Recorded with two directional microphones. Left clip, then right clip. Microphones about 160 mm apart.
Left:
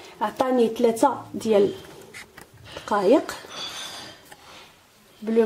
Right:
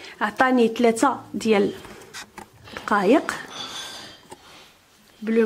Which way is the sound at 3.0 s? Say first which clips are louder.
Left 1 dB; 25° right (ahead or behind).